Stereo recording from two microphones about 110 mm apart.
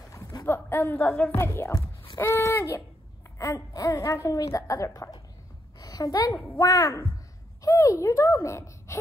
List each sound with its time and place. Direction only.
0.1 s a sound: 30° left (ahead or behind)
1.0 s a woman's voice: 10° left (ahead or behind)
1.3 s speech: 25° left (ahead or behind)
5.8 s a sound: 35° left (ahead or behind)
6.3 s a woman's voice: 20° left (ahead or behind)
6.6 s speech: 30° left (ahead or behind)